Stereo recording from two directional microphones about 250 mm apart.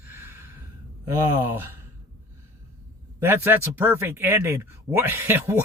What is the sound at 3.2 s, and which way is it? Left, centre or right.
Speech, centre.